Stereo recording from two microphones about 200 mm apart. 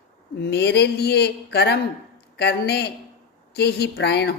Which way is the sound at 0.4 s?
55° left (ahead or behind).